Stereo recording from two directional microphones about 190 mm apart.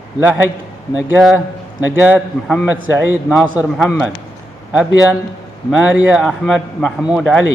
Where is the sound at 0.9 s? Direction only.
Centre (ahead or behind).